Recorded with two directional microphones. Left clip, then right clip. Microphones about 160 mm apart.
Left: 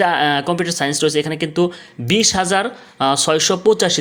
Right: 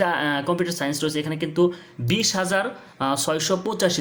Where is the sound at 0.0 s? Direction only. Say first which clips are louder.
Left 7 dB; 35° left (ahead or behind).